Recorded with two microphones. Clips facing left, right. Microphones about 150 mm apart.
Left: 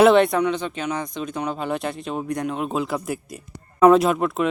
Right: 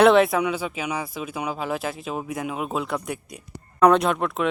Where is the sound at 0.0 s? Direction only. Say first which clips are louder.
Left 1 dB; centre (ahead or behind).